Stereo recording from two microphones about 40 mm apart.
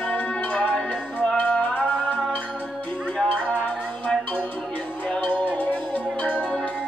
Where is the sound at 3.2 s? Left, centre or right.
Left.